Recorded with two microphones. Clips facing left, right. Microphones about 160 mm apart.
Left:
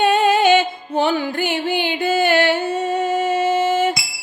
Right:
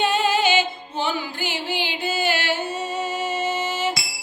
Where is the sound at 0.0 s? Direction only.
55° left (ahead or behind).